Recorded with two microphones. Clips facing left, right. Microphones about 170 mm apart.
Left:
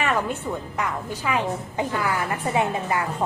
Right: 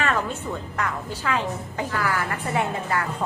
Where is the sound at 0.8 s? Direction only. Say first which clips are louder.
Left 1 dB; 15° left (ahead or behind).